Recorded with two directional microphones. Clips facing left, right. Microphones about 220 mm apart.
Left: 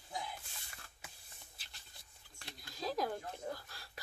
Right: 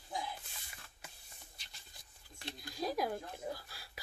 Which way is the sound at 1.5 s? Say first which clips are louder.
Right 1 dB; centre (ahead or behind).